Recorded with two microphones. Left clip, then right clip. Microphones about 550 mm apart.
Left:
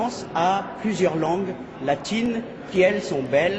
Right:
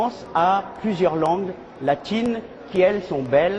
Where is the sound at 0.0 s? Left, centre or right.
Right.